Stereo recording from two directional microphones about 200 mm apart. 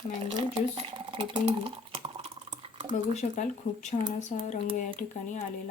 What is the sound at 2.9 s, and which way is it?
Speech, 35° left (ahead or behind).